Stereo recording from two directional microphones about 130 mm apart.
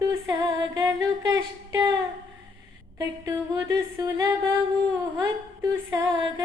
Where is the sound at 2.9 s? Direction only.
25° right (ahead or behind).